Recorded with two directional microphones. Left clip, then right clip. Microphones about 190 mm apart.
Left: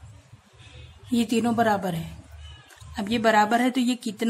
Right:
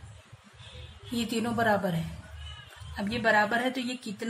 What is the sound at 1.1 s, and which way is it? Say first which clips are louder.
A woman's voice: left 7 dB; 25° left (ahead or behind).